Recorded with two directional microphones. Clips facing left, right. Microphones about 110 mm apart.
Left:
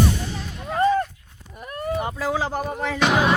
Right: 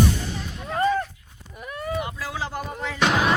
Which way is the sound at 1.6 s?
45° left (ahead or behind).